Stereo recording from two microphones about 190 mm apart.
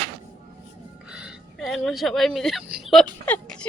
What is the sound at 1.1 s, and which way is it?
Speech, 5° right (ahead or behind).